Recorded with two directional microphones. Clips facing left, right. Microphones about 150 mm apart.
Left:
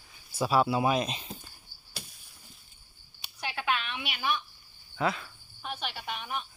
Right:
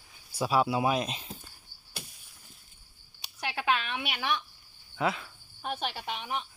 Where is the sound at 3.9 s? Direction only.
60° right (ahead or behind); by 4.4 s 80° right.